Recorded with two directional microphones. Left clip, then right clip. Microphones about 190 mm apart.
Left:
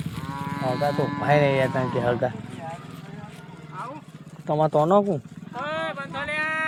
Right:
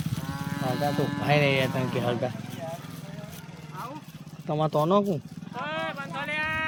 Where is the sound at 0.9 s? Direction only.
50° right (ahead or behind).